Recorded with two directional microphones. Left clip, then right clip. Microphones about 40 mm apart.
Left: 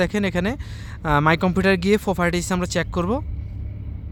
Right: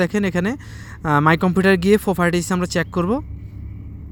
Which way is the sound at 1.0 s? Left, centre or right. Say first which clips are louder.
Right 2 dB; right.